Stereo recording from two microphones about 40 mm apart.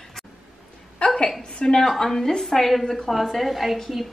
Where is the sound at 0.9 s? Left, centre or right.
Left.